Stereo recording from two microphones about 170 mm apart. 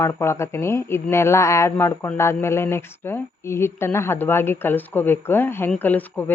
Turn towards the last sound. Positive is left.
turn(degrees=10)  # may be behind; listen again after turning